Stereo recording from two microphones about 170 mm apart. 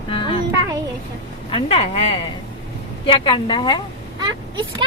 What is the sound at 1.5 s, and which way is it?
Speech, 35° left (ahead or behind).